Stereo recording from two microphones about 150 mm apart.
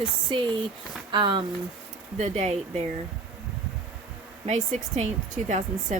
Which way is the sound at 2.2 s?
50° right (ahead or behind).